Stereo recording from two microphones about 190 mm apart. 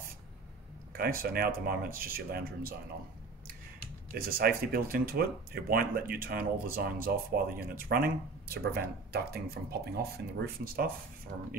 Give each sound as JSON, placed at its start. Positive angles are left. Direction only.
{"t": 1.2, "sound": "speech", "side_deg": -50}
{"t": 4.3, "sound": "speech", "side_deg": -50}